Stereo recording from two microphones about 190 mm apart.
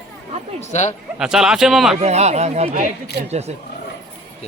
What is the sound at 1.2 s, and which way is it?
Speech, 5° right (ahead or behind).